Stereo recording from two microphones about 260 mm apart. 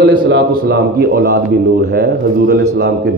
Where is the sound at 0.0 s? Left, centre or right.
Right.